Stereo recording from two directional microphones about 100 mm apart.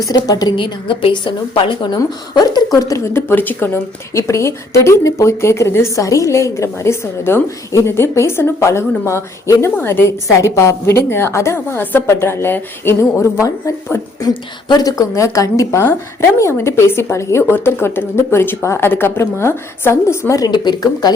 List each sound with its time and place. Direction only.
0.3 s a woman's voice: 40° left (ahead or behind)
2.3 s a woman's voice: 45° left (ahead or behind)
3.1 s speech: 25° left (ahead or behind); by 21.1 s 45° left (ahead or behind)